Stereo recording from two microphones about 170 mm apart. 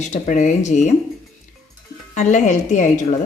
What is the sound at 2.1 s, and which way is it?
Speech, 45° left (ahead or behind).